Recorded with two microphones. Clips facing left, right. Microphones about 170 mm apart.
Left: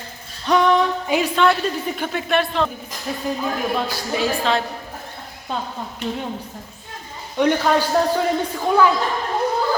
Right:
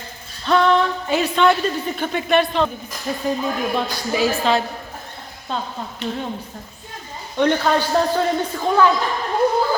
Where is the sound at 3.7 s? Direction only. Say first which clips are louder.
Right 1 dB; 5° right (ahead or behind).